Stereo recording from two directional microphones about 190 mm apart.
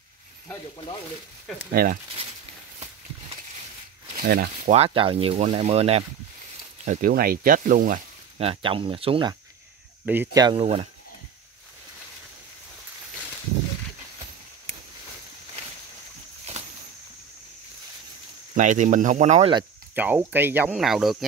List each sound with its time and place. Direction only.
1.7 s speech: 50° right (ahead or behind)
4.6 s speech: 30° right (ahead or behind)
6.8 s speech: 45° right (ahead or behind)
8.4 s speech: 30° right (ahead or behind)
10.0 s speech: 10° right (ahead or behind)
10.4 s speech: 30° right (ahead or behind)
18.5 s speech: 40° right (ahead or behind)
20.0 s speech: 10° right (ahead or behind)